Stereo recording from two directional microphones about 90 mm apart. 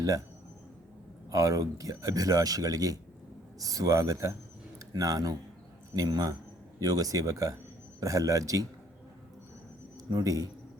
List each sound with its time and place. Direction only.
1.3 s speech: 35° right (ahead or behind)
10.1 s a man's voice: 45° right (ahead or behind)